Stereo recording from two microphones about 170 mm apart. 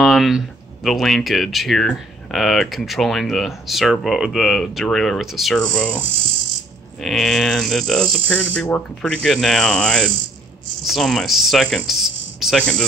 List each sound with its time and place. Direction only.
0.0 s speech: centre (ahead or behind)